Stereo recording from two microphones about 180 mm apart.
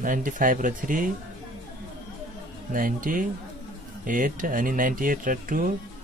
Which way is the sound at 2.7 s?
50° right (ahead or behind).